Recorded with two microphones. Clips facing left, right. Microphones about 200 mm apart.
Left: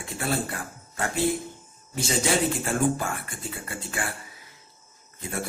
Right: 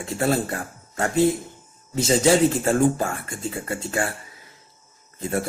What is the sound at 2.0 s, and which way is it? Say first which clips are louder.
Speech: right 7 dB; 40° right (ahead or behind).